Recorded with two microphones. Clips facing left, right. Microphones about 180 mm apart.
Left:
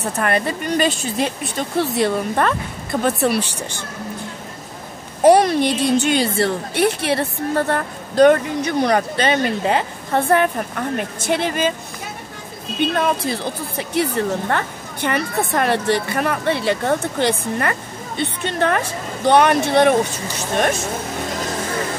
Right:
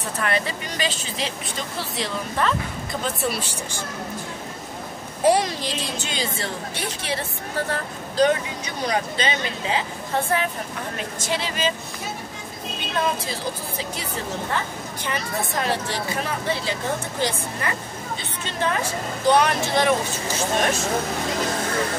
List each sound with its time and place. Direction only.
0.2 s a woman's voice: 55° left (ahead or behind)
5.2 s a woman's voice: 60° left (ahead or behind)
12.9 s a woman's voice: 60° left (ahead or behind)